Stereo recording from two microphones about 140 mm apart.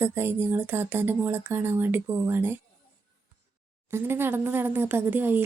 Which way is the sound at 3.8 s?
15° right (ahead or behind).